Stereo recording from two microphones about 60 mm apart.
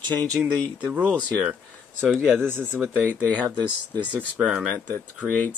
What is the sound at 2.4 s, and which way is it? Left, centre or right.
Speech, right.